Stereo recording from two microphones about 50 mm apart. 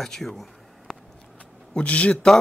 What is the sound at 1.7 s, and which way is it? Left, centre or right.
Speech, left.